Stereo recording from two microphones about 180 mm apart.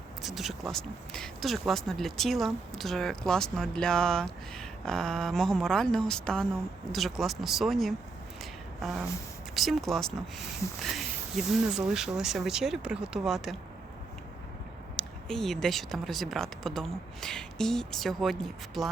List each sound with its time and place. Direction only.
0.2 s speech: centre (ahead or behind)
10.8 s a sound: centre (ahead or behind)
11.9 s speech: 5° right (ahead or behind)
14.9 s speech: centre (ahead or behind)